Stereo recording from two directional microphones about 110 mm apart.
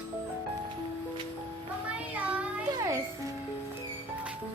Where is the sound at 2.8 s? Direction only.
30° right (ahead or behind).